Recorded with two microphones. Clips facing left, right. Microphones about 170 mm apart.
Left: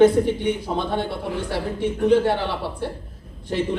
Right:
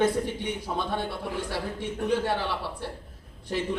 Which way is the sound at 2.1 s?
25° left (ahead or behind).